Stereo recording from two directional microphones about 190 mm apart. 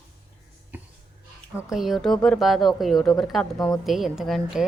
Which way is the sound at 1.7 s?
Centre (ahead or behind).